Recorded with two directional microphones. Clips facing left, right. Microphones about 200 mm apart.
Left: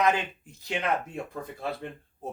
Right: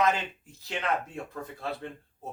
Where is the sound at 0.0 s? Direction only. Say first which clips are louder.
Left 1 dB; 15° left (ahead or behind).